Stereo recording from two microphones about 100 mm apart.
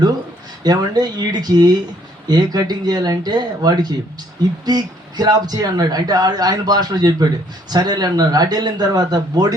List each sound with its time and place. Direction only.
0.6 s speech: 45° right (ahead or behind)